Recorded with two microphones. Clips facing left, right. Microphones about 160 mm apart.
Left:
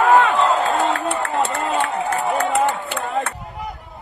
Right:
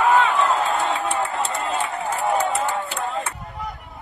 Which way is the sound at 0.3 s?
70° left (ahead or behind).